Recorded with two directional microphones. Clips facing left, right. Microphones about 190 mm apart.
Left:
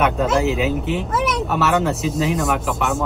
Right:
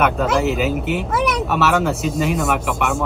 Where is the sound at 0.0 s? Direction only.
Centre (ahead or behind).